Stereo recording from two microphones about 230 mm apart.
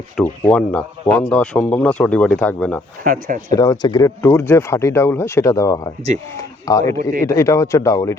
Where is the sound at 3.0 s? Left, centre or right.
Right.